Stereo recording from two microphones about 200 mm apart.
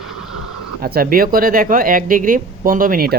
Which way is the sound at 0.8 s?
50° right (ahead or behind).